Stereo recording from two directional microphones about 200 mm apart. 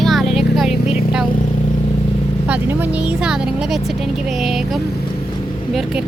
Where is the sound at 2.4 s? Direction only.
10° right (ahead or behind).